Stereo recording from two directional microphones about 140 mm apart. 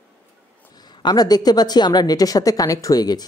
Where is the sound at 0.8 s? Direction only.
30° left (ahead or behind).